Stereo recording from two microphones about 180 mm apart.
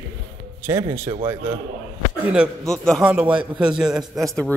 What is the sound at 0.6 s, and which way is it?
Speech, 15° right (ahead or behind).